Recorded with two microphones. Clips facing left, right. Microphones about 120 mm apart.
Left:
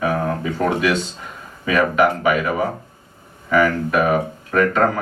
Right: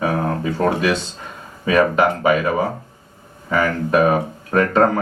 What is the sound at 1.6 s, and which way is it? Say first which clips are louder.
Speech: right 1 dB; 30° right (ahead or behind).